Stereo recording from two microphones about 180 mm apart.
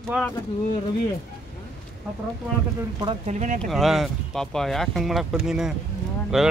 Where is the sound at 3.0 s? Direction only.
40° right (ahead or behind).